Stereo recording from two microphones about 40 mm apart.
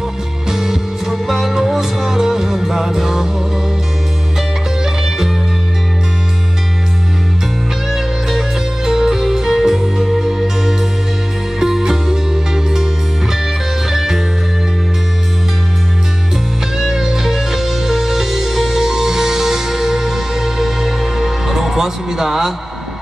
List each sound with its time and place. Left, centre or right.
0.5 s music: centre
7.9 s music: centre
13.8 s music: centre
16.7 s music: centre